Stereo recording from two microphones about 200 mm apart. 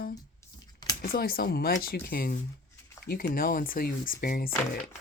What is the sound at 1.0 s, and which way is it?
Speech, 45° left (ahead or behind).